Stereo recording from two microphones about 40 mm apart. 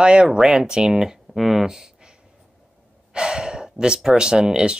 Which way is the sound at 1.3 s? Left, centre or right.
Centre.